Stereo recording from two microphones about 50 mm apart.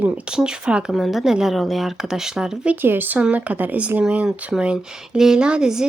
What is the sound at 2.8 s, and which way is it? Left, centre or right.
A woman's voice, right.